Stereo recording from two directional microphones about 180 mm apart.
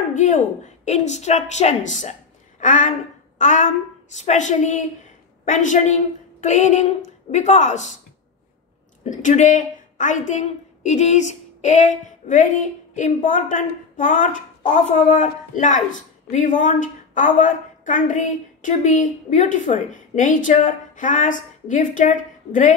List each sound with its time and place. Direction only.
0.1 s a woman's voice: 45° left (ahead or behind)
9.0 s a woman's voice: 45° left (ahead or behind)